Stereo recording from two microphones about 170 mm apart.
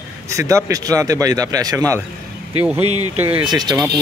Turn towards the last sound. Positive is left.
turn(degrees=-20)  # may be behind; listen again after turning